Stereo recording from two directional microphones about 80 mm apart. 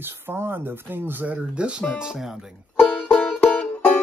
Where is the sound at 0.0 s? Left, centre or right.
Right; by 2.5 s centre.